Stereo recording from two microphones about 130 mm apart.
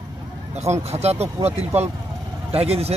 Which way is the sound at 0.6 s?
55° right (ahead or behind).